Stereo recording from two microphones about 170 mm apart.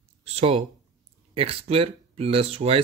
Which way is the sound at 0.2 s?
35° right (ahead or behind).